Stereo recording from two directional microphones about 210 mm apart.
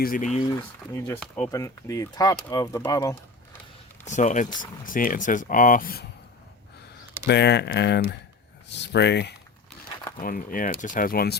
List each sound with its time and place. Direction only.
0.0 s speech: 40° left (ahead or behind)
0.9 s speech: 10° left (ahead or behind)
4.0 s speech: 35° left (ahead or behind)
7.3 s speech: 55° left (ahead or behind)
10.2 s speech: 40° left (ahead or behind)